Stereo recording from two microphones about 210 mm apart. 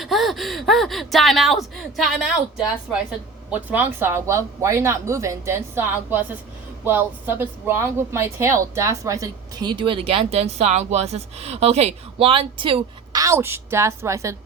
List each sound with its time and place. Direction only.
0.0 s speech: centre (ahead or behind)